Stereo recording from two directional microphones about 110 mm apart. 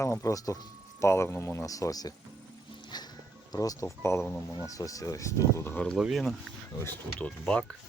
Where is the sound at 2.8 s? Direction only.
40° left (ahead or behind); by 4.4 s 25° left (ahead or behind).